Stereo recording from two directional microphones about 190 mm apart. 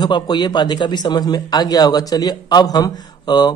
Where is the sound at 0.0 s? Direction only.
20° left (ahead or behind).